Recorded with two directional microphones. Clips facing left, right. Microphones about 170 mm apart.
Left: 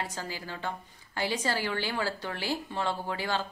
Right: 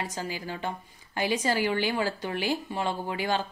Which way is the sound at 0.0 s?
15° right (ahead or behind).